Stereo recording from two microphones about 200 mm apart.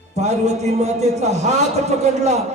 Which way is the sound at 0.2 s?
35° right (ahead or behind).